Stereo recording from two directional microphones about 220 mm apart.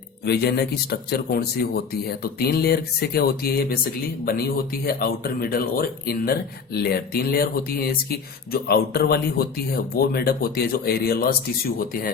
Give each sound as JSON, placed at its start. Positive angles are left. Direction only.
{"t": 0.3, "sound": "speech", "side_deg": 45}